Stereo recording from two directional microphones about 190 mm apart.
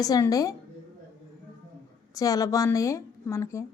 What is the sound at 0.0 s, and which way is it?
Speech, 20° left (ahead or behind).